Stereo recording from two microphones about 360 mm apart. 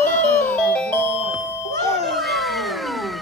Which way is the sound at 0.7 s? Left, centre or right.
Centre.